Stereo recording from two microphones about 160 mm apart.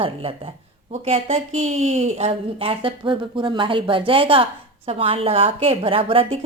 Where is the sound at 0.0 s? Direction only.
35° right (ahead or behind).